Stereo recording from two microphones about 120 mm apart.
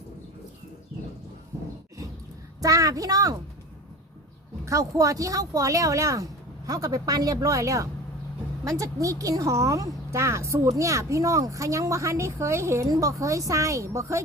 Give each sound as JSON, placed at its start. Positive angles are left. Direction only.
{"t": 2.6, "sound": "a woman's voice", "side_deg": -30}
{"t": 4.6, "sound": "a woman's voice", "side_deg": -25}